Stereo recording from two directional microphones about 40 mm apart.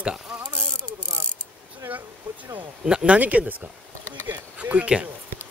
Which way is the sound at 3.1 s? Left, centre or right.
Right.